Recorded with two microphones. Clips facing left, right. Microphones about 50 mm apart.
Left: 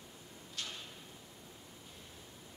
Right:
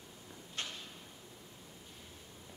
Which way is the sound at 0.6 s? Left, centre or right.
Right.